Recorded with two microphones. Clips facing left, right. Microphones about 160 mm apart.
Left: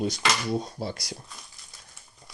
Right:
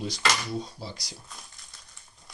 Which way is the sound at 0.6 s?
60° left (ahead or behind).